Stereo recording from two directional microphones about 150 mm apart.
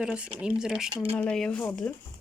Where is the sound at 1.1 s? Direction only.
5° left (ahead or behind).